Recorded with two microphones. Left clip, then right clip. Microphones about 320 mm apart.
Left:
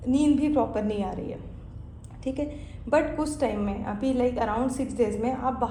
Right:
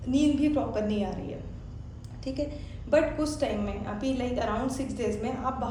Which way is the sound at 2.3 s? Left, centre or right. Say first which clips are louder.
Left 2 dB; left.